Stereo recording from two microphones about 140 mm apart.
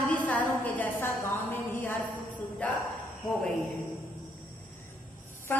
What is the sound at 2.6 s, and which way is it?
Speech, 10° left (ahead or behind).